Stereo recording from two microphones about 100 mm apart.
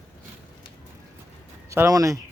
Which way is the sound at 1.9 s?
35° right (ahead or behind).